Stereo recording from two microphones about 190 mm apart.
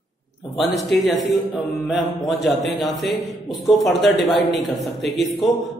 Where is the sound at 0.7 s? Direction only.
Centre (ahead or behind).